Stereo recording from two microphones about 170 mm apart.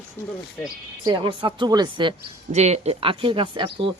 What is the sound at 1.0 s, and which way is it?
Speech, 30° right (ahead or behind).